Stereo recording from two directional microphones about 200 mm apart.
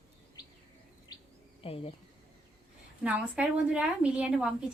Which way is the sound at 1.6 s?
30° left (ahead or behind).